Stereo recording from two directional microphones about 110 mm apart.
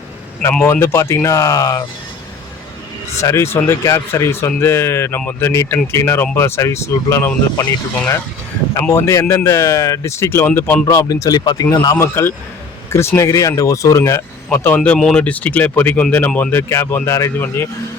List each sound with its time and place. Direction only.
0.6 s speech: 20° left (ahead or behind)
3.2 s speech: 25° left (ahead or behind)
8.8 s speech: 25° left (ahead or behind)
10.8 s speech: 30° left (ahead or behind)
14.9 s speech: 5° left (ahead or behind); by 17.7 s 25° left (ahead or behind)